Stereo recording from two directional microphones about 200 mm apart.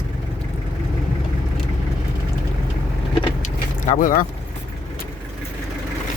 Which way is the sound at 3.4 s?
40° left (ahead or behind).